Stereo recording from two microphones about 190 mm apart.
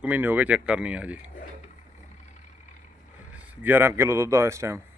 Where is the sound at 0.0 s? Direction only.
10° right (ahead or behind).